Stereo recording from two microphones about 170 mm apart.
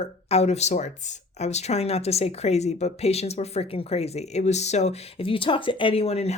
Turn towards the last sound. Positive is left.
turn(degrees=35)  # may be behind; listen again after turning